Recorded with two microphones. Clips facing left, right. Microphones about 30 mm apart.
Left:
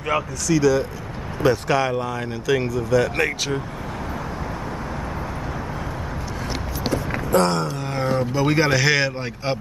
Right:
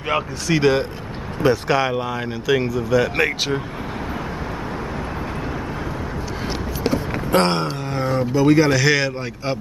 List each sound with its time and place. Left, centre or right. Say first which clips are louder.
0.1 s speech: even; right
1.4 s speech: right 1 dB; centre
7.2 s a sound: right 1 dB; right
7.9 s speech: even; centre
8.4 s speech: right 5 dB; centre